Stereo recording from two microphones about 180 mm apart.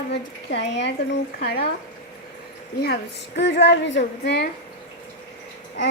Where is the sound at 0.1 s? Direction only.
70° left (ahead or behind).